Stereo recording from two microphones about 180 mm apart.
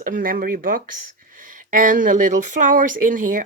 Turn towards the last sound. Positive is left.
turn(degrees=-45)  # may be behind; listen again after turning